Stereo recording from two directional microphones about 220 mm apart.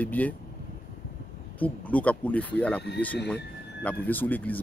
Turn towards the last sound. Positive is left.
turn(degrees=10)  # may be behind; listen again after turning